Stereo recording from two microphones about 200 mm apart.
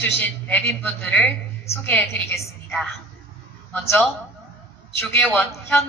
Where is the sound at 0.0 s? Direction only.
10° left (ahead or behind).